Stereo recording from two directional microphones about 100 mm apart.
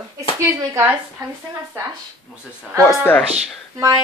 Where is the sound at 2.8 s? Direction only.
20° left (ahead or behind).